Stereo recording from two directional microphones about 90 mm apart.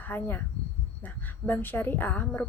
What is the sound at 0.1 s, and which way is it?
A woman's voice, 20° left (ahead or behind).